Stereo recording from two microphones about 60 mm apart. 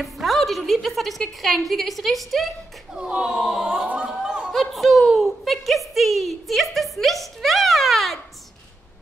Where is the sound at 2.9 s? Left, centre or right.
Centre.